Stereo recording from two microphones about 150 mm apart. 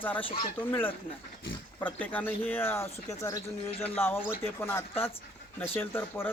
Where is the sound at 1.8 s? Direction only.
10° left (ahead or behind).